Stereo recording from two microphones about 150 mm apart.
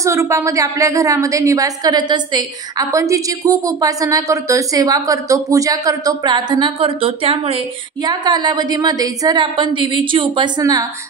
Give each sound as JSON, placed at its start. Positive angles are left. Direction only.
{"t": 0.0, "sound": "a woman's voice", "side_deg": -20}